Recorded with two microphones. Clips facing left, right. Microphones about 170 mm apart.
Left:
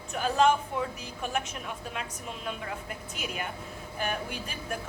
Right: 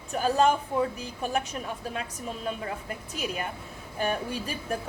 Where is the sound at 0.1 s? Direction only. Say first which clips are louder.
Right 1 dB; 35° right (ahead or behind).